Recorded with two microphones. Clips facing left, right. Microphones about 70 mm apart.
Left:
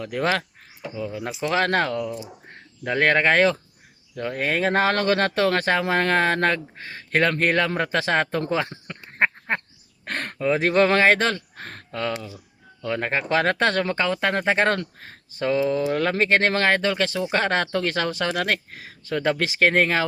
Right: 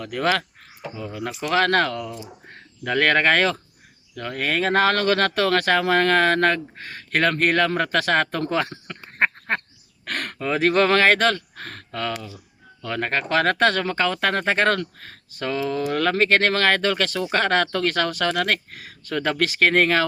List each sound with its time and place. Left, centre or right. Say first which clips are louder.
0.0 s speech: right 1 dB; left
0.8 s speech: left 2 dB; centre
1.4 s speech: right 2 dB; left
10.1 s a sound: right 1 dB; left
10.4 s speech: even; left